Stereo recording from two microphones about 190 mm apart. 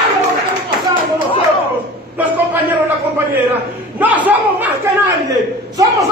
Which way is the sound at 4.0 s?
10° right (ahead or behind).